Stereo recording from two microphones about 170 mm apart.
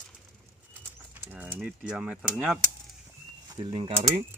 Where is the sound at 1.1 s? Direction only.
10° right (ahead or behind).